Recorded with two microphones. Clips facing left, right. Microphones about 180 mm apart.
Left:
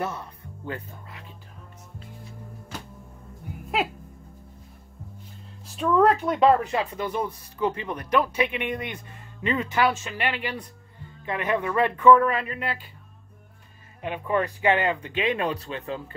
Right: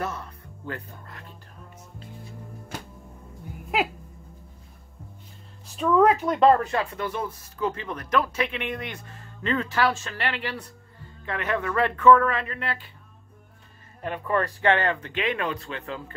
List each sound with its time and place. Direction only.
0.0 s speech: 25° left (ahead or behind)
5.7 s speech: centre (ahead or behind)
14.0 s speech: 10° left (ahead or behind)